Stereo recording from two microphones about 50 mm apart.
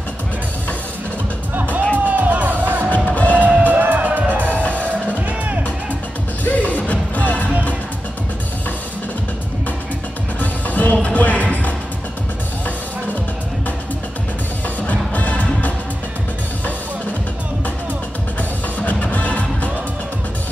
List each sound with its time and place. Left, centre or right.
1.5 s music: right
2.9 s music: left
3.6 s music: right
6.4 s music: left
10.4 s music: left
14.9 s music: left
18.9 s music: left